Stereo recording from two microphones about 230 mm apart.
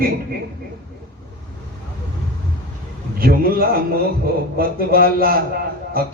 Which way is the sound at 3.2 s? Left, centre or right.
Right.